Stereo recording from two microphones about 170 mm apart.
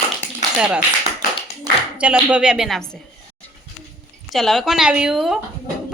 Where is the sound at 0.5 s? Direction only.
5° right (ahead or behind).